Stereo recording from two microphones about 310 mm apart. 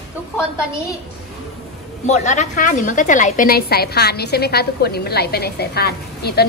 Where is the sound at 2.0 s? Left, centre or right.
Left.